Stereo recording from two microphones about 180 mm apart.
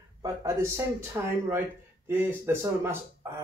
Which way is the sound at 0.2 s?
20° right (ahead or behind).